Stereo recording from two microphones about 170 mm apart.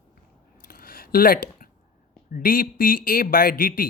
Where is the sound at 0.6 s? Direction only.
60° left (ahead or behind).